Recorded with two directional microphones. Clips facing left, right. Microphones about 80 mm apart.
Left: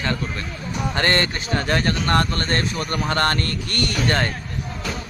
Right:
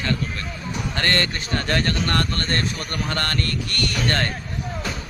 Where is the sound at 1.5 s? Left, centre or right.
Centre.